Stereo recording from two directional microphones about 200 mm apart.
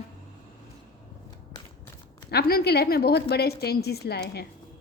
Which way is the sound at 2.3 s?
50° left (ahead or behind).